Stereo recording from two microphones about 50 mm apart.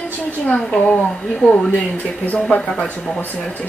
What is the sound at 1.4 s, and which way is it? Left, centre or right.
Speech, left.